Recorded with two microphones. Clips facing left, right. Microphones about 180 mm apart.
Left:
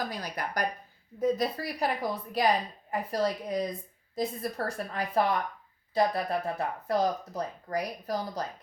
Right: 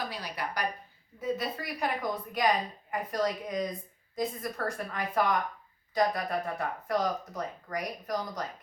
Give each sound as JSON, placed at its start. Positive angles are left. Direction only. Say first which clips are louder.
{"t": 0.0, "sound": "speech", "louder": "left 2 dB", "side_deg": 45}